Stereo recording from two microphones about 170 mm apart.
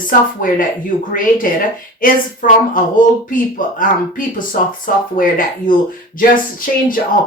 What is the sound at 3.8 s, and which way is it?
A woman's voice, 55° left (ahead or behind).